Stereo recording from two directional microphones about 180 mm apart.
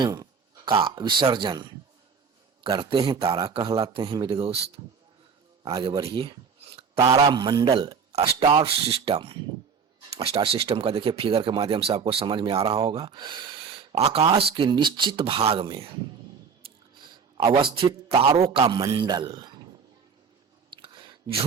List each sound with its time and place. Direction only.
0.0 s speech: 25° right (ahead or behind)
5.6 s speech: 20° right (ahead or behind)
6.0 s a man's voice: 30° right (ahead or behind)
20.7 s a sound: 25° right (ahead or behind)